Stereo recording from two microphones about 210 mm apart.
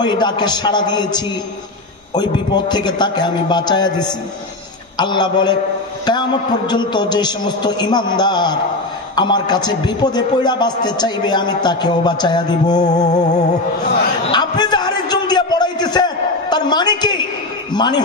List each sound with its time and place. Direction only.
0.0 s a man's voice: 20° left (ahead or behind)
6.7 s a man's voice: 20° left (ahead or behind)
13.1 s music: 35° left (ahead or behind)
14.2 s a sound: 20° left (ahead or behind)
17.7 s a man's voice: 20° left (ahead or behind)